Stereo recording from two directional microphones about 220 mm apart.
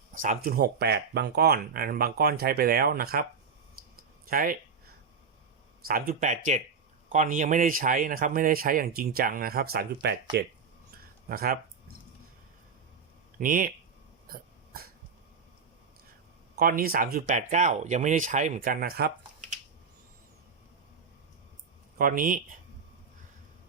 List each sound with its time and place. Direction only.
0.1 s speech: 35° right (ahead or behind)
4.3 s speech: 40° right (ahead or behind)
5.8 s speech: 40° right (ahead or behind)
10.9 s a sound: 45° right (ahead or behind)
13.4 s speech: 40° right (ahead or behind)
14.3 s a sound: 45° right (ahead or behind)
16.6 s speech: 40° right (ahead or behind)
21.9 s speech: 40° right (ahead or behind)